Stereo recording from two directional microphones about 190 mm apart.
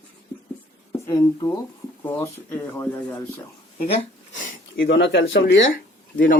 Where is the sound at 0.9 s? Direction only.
20° left (ahead or behind).